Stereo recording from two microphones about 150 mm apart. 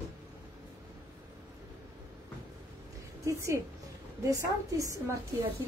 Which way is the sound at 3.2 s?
20° right (ahead or behind).